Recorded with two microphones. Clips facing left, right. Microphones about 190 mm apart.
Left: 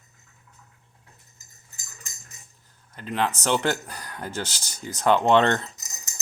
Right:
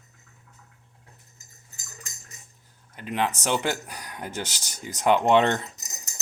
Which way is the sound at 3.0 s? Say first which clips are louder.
Left 1 dB; 15° right (ahead or behind).